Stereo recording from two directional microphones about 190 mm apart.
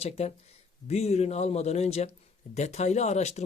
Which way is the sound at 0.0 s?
35° left (ahead or behind).